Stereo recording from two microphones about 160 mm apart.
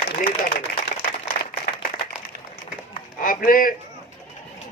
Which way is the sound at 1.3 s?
90° left.